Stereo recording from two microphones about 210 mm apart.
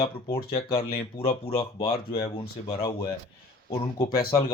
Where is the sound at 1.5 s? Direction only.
15° left (ahead or behind).